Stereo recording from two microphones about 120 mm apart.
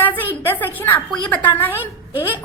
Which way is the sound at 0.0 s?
15° left (ahead or behind).